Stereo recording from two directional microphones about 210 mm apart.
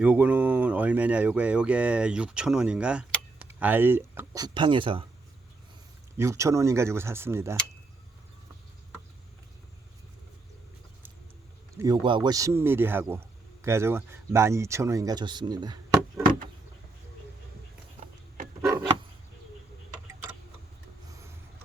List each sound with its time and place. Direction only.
0.0 s speech: 5° right (ahead or behind); by 5.0 s 25° right (ahead or behind)
6.1 s speech: 15° right (ahead or behind)
11.8 s speech: 20° right (ahead or behind)
18.7 s a sound: 20° right (ahead or behind)